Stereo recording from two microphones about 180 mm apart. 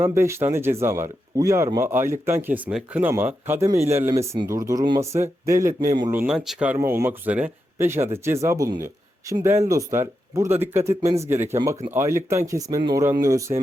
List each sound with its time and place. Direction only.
0.0 s speech: 15° right (ahead or behind)
6.1 s speech: 5° right (ahead or behind)